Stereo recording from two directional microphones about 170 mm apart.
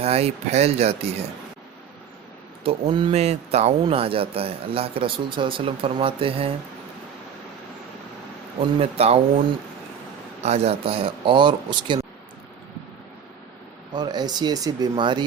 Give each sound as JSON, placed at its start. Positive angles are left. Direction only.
{"t": 0.0, "sound": "a man's voice", "side_deg": -35}
{"t": 2.6, "sound": "a man's voice", "side_deg": -30}
{"t": 3.1, "sound": "a man's voice", "side_deg": -40}
{"t": 8.6, "sound": "a man's voice", "side_deg": -35}
{"t": 10.4, "sound": "a man's voice", "side_deg": -40}
{"t": 13.9, "sound": "speech", "side_deg": -25}